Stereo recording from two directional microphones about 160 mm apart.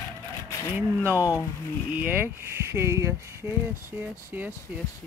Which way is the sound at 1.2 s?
20° left (ahead or behind).